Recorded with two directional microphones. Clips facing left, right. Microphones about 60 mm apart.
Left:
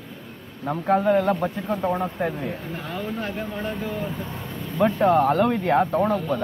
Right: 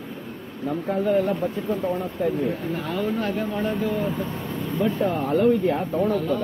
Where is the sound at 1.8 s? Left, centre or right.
Left.